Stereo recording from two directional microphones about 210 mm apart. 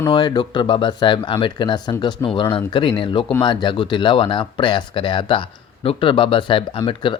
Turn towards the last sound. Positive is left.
turn(degrees=25)  # may be behind; listen again after turning